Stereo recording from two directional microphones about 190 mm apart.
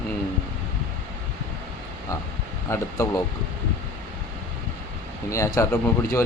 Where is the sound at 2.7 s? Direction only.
15° left (ahead or behind).